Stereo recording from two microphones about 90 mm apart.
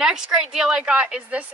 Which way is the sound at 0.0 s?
5° right (ahead or behind).